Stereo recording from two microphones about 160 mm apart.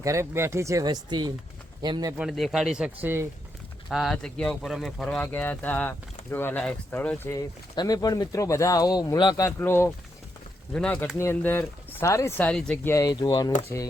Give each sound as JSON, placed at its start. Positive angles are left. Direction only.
{"t": 0.0, "sound": "speech", "side_deg": -20}
{"t": 2.1, "sound": "speech", "side_deg": 0}
{"t": 7.3, "sound": "speech", "side_deg": 25}
{"t": 12.5, "sound": "speech", "side_deg": 5}